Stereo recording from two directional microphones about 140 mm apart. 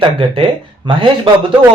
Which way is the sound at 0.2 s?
40° right (ahead or behind).